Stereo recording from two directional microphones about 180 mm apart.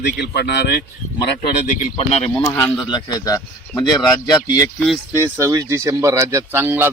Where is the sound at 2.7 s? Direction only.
25° left (ahead or behind).